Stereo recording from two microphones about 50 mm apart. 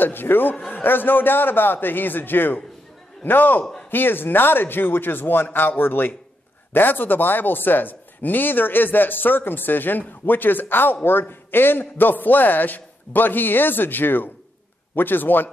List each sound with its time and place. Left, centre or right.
0.0 s a man's voice: left